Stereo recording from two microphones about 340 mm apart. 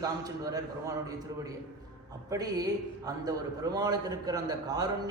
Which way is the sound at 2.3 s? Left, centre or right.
Centre.